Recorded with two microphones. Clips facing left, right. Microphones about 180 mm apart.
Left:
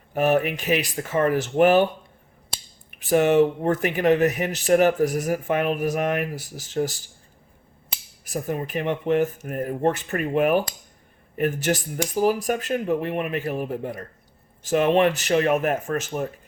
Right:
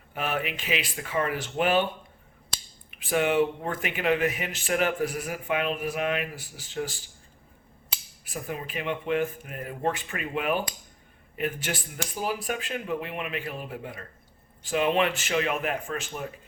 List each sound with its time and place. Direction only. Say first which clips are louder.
0.1 s speech: left 10 dB; 40° left (ahead or behind)
3.0 s speech: left 6 dB; 40° left (ahead or behind)
8.2 s speech: left 7 dB; 45° left (ahead or behind)